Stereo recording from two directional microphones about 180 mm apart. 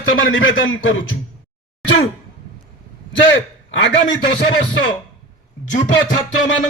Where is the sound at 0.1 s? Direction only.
90° left.